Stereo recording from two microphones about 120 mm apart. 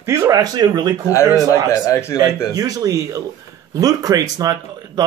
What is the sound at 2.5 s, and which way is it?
A man's voice, 30° right (ahead or behind).